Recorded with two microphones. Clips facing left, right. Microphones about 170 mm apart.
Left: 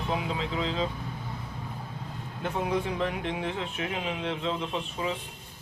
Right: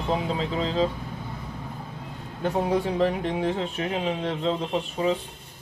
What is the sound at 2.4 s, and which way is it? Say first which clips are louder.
Speech: right 5 dB; 35° right (ahead or behind).